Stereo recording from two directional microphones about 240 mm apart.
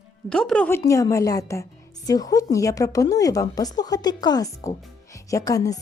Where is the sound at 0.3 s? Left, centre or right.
Centre.